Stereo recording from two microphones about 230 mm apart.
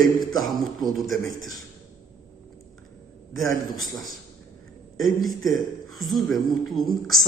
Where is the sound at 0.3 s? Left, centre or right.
Centre.